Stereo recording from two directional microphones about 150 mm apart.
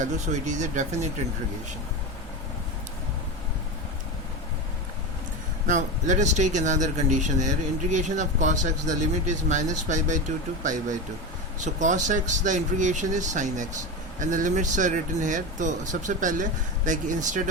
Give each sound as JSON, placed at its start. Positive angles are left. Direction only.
{"t": 0.0, "sound": "speech", "side_deg": -55}
{"t": 5.6, "sound": "speech", "side_deg": -55}